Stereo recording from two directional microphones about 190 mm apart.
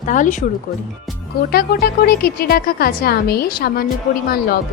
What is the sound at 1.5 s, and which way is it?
Speech, 55° left (ahead or behind).